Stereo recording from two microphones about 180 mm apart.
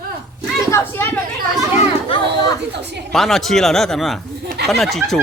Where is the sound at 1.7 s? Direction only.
30° left (ahead or behind).